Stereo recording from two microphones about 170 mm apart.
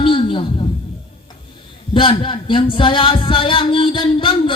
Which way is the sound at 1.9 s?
30° left (ahead or behind).